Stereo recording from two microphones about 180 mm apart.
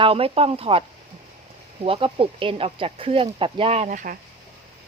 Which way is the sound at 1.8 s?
30° right (ahead or behind).